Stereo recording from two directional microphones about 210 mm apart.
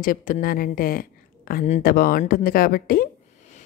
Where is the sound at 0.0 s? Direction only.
40° left (ahead or behind).